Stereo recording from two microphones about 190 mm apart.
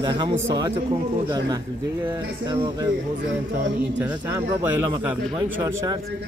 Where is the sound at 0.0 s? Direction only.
25° right (ahead or behind).